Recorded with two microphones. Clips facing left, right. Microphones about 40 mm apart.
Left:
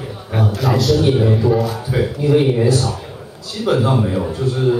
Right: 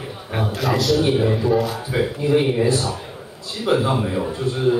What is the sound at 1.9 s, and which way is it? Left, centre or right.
Speech, right.